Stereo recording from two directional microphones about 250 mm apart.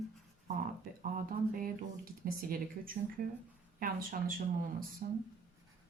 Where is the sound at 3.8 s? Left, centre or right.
Right.